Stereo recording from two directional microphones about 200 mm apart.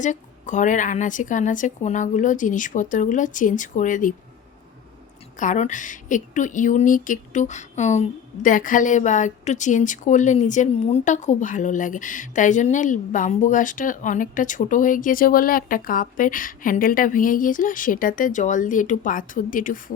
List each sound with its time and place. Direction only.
0.0 s a woman's voice: 40° left (ahead or behind)
5.4 s a woman's voice: 40° left (ahead or behind)